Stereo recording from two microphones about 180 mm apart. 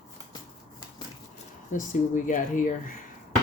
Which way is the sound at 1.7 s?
45° left (ahead or behind).